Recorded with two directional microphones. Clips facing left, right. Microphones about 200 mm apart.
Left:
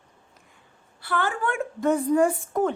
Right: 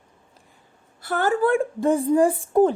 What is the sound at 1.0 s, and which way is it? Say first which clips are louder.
A woman's voice: right 6 dB; 45° right (ahead or behind).